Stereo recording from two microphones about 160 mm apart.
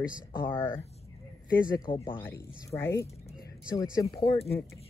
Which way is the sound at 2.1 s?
15° left (ahead or behind).